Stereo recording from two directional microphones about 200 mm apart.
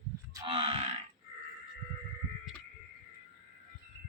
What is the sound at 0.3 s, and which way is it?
Grunt, 25° right (ahead or behind).